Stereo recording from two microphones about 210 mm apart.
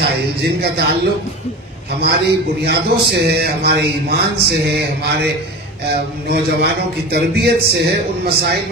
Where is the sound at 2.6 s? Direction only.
50° right (ahead or behind).